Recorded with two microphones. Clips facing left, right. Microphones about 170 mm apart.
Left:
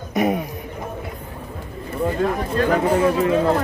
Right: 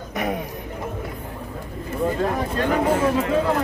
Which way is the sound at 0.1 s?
15° left (ahead or behind).